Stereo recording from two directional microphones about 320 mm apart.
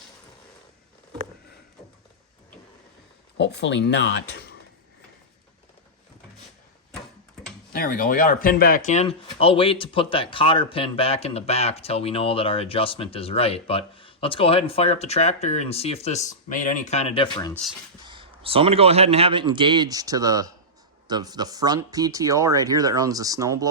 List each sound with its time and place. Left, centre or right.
3.3 s speech: left
7.7 s speech: left; by 17.6 s centre
18.0 s speech: centre